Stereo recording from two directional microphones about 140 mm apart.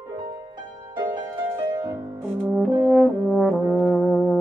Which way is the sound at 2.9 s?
5° left (ahead or behind).